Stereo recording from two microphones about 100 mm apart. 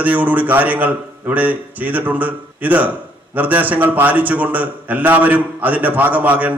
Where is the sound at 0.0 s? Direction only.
15° right (ahead or behind).